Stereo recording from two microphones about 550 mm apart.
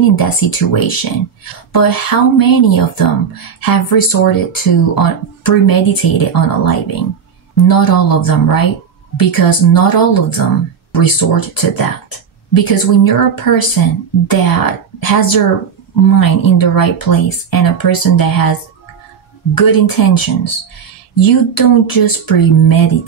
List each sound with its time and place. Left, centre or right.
0.1 s speech: left